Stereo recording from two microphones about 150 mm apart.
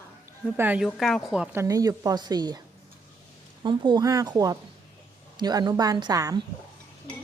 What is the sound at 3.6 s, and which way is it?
Speech, 30° right (ahead or behind).